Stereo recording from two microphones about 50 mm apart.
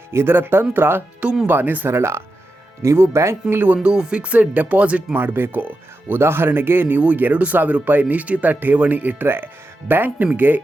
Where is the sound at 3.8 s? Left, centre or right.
Centre.